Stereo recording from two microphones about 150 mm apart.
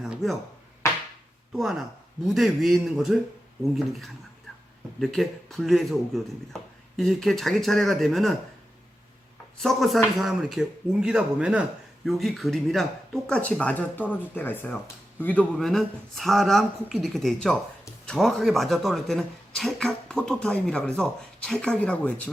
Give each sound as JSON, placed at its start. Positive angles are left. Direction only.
{"t": 0.0, "sound": "a sound", "side_deg": 0}
{"t": 1.5, "sound": "speech", "side_deg": 0}
{"t": 9.6, "sound": "speech", "side_deg": 0}